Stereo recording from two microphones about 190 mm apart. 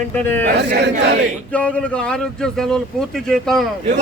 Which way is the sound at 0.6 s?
65° right (ahead or behind).